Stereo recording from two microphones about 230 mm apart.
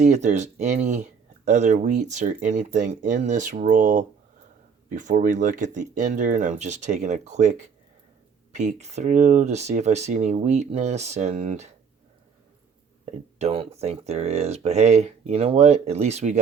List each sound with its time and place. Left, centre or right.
0.0 s speech: right
8.5 s speech: right
13.4 s speech: right